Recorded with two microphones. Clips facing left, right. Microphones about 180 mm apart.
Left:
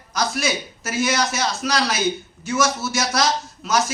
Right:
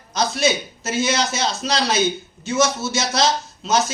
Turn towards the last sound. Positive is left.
turn(degrees=-25)  # may be behind; listen again after turning